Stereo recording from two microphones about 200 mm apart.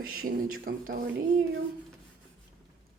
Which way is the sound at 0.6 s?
45° right (ahead or behind).